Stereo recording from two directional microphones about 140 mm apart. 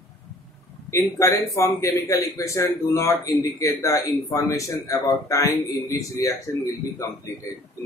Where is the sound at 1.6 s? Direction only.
20° left (ahead or behind).